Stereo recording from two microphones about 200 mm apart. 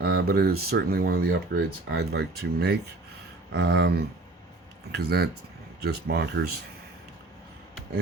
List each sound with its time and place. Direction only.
0.0 s speech: 50° right (ahead or behind)